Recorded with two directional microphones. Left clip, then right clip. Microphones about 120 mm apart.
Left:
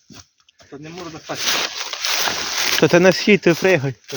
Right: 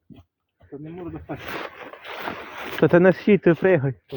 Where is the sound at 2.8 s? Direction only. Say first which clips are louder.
Left 2 dB; 25° left (ahead or behind).